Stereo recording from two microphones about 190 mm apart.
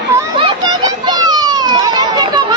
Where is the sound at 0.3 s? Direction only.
25° right (ahead or behind).